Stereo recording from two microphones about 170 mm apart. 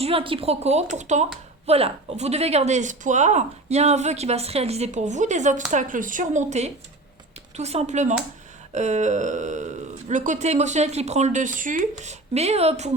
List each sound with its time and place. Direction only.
0.0 s speech: 30° right (ahead or behind)